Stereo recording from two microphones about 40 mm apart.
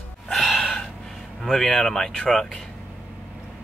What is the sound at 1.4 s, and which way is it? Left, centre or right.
Speech, centre.